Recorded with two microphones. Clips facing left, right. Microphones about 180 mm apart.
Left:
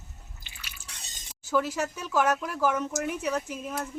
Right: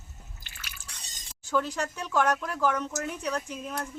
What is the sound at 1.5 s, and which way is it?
Speech, 5° left (ahead or behind).